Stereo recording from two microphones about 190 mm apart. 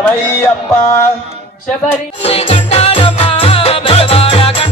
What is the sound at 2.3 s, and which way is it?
Music, 30° left (ahead or behind).